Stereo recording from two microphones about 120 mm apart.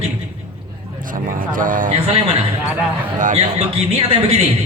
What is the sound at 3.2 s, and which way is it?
Speech, 90° right.